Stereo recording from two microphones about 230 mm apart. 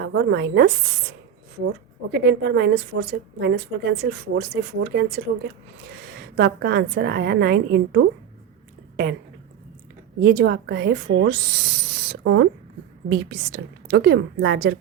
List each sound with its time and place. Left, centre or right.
0.0 s speech: right
2.1 s speech: right
6.3 s speech: right
10.2 s speech: right
13.1 s speech: right